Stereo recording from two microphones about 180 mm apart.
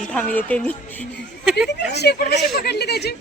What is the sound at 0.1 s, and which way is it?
Speech, 10° left (ahead or behind).